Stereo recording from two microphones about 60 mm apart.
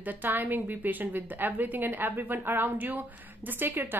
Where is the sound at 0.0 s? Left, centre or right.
Right.